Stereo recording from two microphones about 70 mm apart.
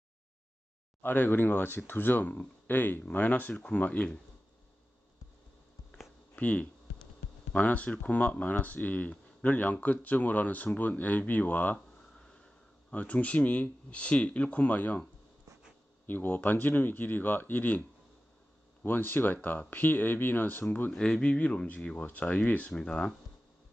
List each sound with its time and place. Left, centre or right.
1.0 s speech: left
6.3 s speech: left
12.1 s sniff: centre
12.9 s speech: left
16.1 s speech: left
18.9 s speech: left
20.9 s speech: centre